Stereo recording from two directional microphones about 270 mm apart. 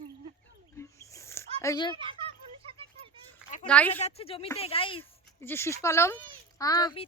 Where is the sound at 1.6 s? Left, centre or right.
Centre.